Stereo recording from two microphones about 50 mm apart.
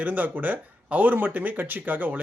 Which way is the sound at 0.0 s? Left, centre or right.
Right.